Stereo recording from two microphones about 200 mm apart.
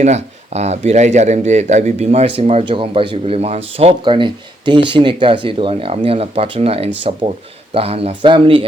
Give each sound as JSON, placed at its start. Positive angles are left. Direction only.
{"t": 0.0, "sound": "speech", "side_deg": -35}